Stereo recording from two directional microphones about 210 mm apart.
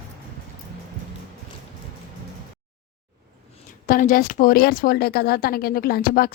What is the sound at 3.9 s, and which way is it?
A woman's voice, 40° left (ahead or behind).